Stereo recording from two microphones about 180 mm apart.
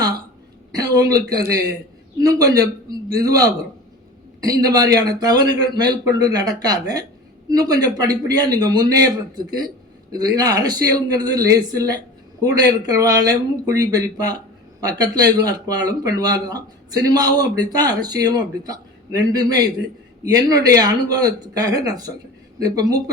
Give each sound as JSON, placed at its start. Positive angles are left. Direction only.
{"t": 0.8, "sound": "speech", "side_deg": -20}